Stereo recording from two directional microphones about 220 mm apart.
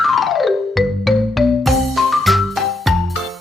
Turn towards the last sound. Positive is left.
turn(degrees=0)  # may be behind; listen again after turning